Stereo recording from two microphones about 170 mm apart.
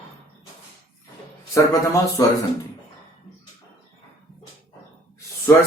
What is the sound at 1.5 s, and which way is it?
Speech, 20° left (ahead or behind).